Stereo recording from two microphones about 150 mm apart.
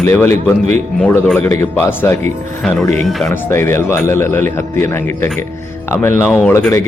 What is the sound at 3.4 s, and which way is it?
Speech, 15° left (ahead or behind).